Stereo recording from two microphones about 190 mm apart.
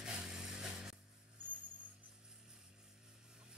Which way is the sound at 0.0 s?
5° right (ahead or behind).